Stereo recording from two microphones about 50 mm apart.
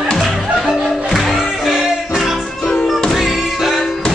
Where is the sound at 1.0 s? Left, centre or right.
Centre.